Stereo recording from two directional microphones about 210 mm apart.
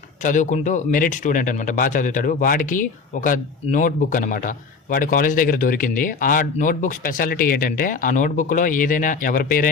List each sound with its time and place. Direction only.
0.2 s a man's voice: 35° left (ahead or behind)